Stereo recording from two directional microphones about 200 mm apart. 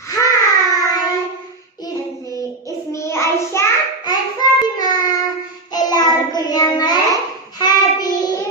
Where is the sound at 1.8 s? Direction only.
15° left (ahead or behind).